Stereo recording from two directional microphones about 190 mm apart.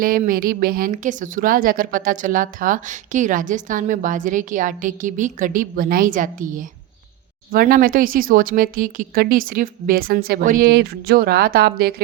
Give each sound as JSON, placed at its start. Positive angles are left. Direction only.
{"t": 0.0, "sound": "speech", "side_deg": -50}